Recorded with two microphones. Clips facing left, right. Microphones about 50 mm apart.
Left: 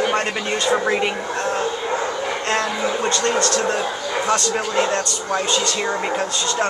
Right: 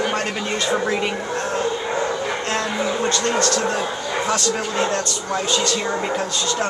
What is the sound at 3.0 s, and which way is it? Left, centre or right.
Speech, centre.